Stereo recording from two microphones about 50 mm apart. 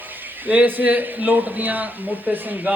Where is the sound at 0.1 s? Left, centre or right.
Right.